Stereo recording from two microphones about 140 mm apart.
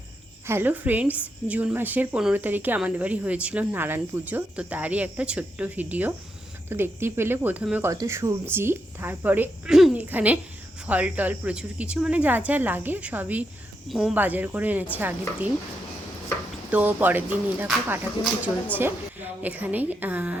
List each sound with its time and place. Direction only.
0.4 s a woman's voice: 15° right (ahead or behind)
14.2 s a woman's voice: 15° right (ahead or behind)
16.7 s a woman's voice: 15° right (ahead or behind)